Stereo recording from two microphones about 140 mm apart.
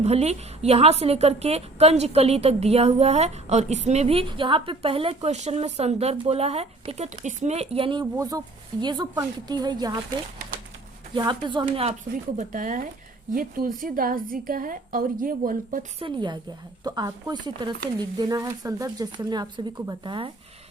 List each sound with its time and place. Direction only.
0.0 s a woman's voice: 50° right (ahead or behind)
8.1 s speech: 25° right (ahead or behind)
11.1 s speech: 35° right (ahead or behind)
11.6 s a woman's voice: 45° right (ahead or behind)
12.4 s speech: 65° right (ahead or behind)
13.3 s a woman's voice: 85° right
16.0 s speech: 35° right (ahead or behind)